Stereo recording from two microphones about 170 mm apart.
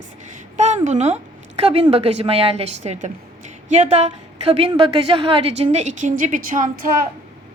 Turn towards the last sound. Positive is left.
turn(degrees=-55)  # may be behind; listen again after turning